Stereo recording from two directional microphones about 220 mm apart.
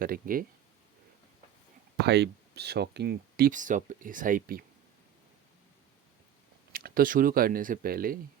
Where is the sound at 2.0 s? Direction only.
50° right (ahead or behind).